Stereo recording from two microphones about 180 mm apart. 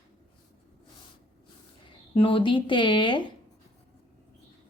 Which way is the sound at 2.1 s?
30° left (ahead or behind).